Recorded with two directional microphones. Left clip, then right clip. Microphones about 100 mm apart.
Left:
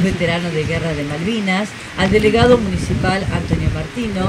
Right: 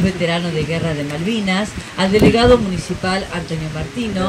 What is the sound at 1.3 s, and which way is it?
Speech, 15° right (ahead or behind).